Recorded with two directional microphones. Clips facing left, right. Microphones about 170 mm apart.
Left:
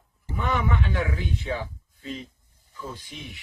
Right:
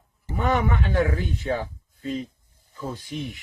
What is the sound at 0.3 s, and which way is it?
Speech, 45° right (ahead or behind).